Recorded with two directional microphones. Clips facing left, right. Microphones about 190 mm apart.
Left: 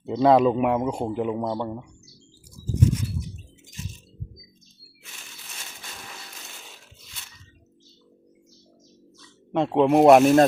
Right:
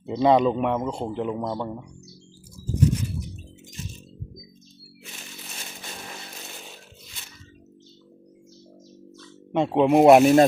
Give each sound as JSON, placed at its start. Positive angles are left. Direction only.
{"t": 0.0, "sound": "speech", "side_deg": 0}
{"t": 9.5, "sound": "speech", "side_deg": 0}